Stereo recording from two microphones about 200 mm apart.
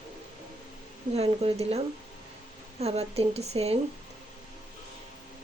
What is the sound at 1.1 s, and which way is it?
A woman's voice, 30° right (ahead or behind).